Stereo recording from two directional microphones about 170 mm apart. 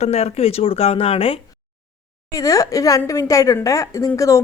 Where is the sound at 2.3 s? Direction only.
20° left (ahead or behind).